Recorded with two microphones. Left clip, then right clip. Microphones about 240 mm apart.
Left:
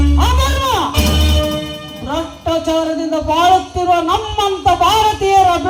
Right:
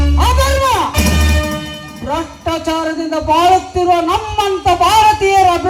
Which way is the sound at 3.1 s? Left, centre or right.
Right.